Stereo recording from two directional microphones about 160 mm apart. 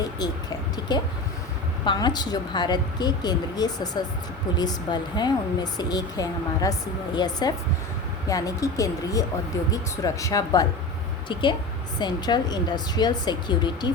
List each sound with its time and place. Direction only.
0.9 s speech: 25° left (ahead or behind)